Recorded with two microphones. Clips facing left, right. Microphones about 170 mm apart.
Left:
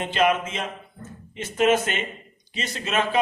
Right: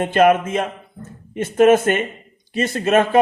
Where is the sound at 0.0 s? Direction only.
50° right (ahead or behind).